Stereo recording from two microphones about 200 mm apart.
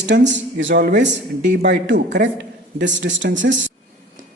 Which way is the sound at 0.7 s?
50° right (ahead or behind).